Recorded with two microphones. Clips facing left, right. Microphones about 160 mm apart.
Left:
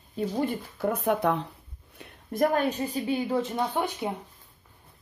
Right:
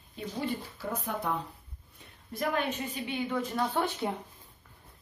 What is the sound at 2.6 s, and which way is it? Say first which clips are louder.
A woman's voice: left 7 dB; 35° left (ahead or behind).